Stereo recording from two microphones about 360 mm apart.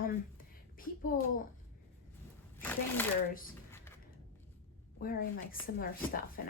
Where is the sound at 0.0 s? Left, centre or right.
Left.